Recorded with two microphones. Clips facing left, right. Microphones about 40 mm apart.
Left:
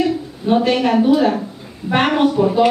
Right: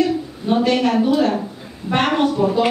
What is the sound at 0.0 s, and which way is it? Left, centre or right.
Speech, centre.